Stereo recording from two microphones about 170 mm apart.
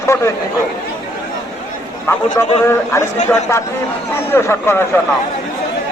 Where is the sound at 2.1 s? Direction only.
15° left (ahead or behind).